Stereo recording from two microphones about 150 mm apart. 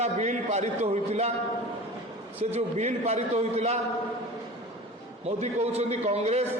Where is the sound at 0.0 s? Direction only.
50° right (ahead or behind).